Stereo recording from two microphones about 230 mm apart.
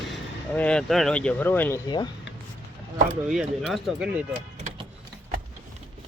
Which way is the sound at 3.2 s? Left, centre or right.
Centre.